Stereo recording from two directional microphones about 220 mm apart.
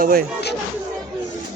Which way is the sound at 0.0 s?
45° right (ahead or behind).